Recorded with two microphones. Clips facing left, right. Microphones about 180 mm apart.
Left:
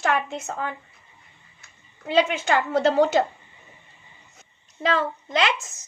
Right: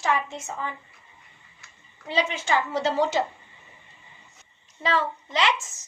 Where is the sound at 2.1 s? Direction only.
55° left (ahead or behind).